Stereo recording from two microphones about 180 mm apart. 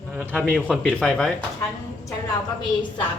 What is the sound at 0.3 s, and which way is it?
Speech, 10° right (ahead or behind).